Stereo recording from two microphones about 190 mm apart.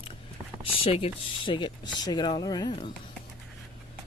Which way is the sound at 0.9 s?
30° left (ahead or behind).